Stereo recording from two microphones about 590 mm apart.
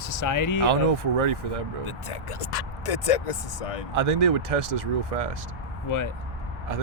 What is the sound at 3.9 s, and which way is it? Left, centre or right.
Speech, right.